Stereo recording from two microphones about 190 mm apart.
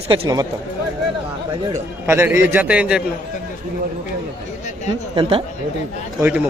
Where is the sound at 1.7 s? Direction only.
15° right (ahead or behind).